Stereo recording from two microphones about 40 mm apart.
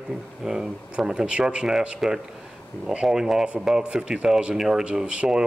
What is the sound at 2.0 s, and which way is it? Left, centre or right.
Speech, centre.